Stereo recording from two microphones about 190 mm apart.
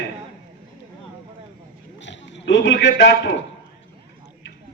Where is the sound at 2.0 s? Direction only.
70° left (ahead or behind).